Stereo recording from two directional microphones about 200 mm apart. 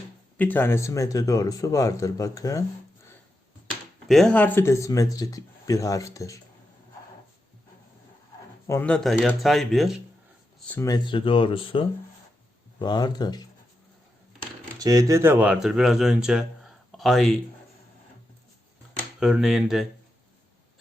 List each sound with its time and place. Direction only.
0.3 s speech: 10° left (ahead or behind)
4.1 s speech: 5° left (ahead or behind)
8.6 s speech: 10° left (ahead or behind)
10.7 s speech: 15° left (ahead or behind)
14.8 s speech: 15° right (ahead or behind); by 17.4 s centre (ahead or behind)
19.2 s speech: centre (ahead or behind)